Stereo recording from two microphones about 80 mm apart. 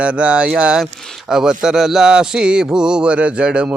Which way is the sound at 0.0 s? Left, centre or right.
Centre.